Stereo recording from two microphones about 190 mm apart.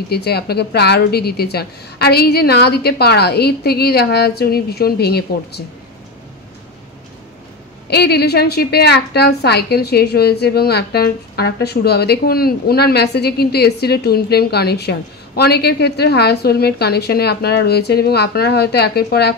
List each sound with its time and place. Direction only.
0.1 s a woman's voice: 55° left (ahead or behind)
7.9 s a woman's voice: 60° left (ahead or behind)